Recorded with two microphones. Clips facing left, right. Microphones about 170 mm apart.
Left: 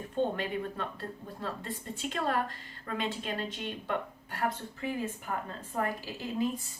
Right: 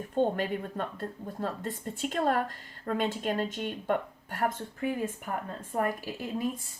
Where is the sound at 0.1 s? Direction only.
45° right (ahead or behind).